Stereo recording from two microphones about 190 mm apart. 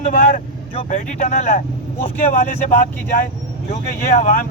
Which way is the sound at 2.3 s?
45° left (ahead or behind).